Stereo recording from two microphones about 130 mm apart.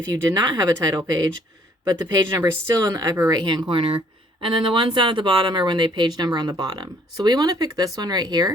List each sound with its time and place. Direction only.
0.1 s speech: 35° right (ahead or behind)